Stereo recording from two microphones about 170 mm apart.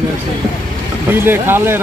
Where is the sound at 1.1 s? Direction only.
15° right (ahead or behind).